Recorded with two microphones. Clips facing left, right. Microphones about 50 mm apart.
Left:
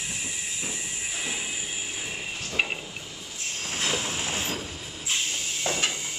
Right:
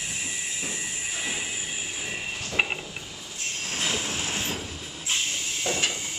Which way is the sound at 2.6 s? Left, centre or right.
Centre.